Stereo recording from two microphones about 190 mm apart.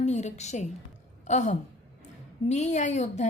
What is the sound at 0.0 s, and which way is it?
A woman's voice, 40° left (ahead or behind).